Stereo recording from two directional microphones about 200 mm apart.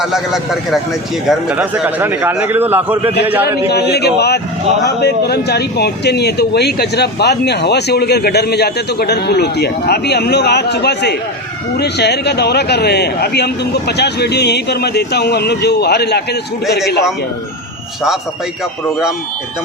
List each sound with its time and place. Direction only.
0.0 s a man's voice: centre (ahead or behind)
3.7 s speech: 55° left (ahead or behind)